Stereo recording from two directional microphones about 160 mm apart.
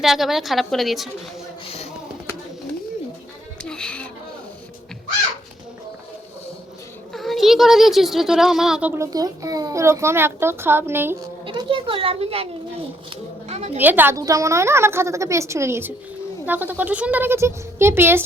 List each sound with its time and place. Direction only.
0.0 s speech: centre (ahead or behind)
1.6 s a sound: 40° left (ahead or behind)
3.6 s music: 5° left (ahead or behind)
7.1 s speech: centre (ahead or behind)
9.0 s a child's voice: 25° right (ahead or behind)
11.4 s a child's voice: 30° right (ahead or behind)
13.5 s a sound: 40° right (ahead or behind)
13.7 s a child's voice: 10° right (ahead or behind)